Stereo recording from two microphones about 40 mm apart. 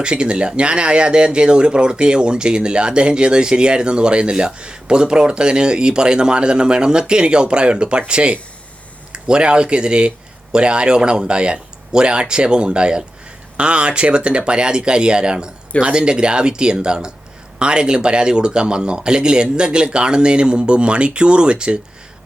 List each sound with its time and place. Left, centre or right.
0.0 s speech: right